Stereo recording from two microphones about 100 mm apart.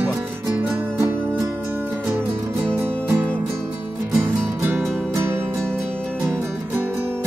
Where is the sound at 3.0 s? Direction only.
20° right (ahead or behind).